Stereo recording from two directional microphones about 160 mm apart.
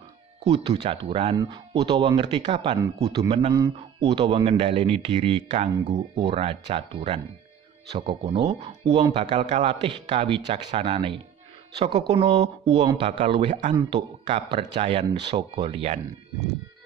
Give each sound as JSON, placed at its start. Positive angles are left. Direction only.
{"t": 0.5, "sound": "a man's voice", "side_deg": -35}